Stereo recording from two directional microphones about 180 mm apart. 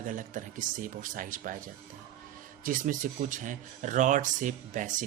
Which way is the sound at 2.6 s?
50° right (ahead or behind).